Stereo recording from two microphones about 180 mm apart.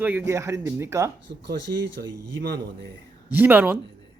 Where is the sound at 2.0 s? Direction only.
70° right (ahead or behind).